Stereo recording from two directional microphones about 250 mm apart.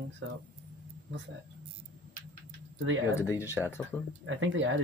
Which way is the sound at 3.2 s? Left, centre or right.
Centre.